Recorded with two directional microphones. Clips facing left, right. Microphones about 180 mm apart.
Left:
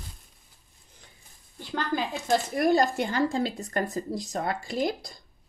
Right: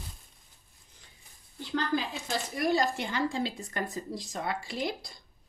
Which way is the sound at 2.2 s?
50° left (ahead or behind).